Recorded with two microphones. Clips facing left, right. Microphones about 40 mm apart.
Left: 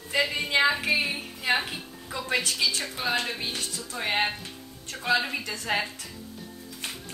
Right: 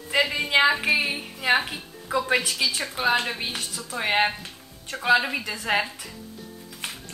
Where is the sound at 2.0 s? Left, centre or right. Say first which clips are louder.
Right 9 dB; right.